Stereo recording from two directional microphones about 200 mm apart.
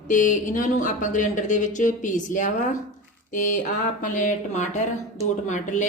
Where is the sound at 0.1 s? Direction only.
40° left (ahead or behind).